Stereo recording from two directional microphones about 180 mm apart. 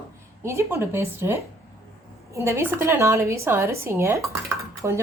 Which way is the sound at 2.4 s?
15° right (ahead or behind).